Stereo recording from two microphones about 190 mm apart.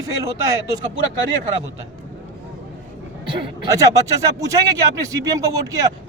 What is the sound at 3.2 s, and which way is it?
Speech, 25° right (ahead or behind).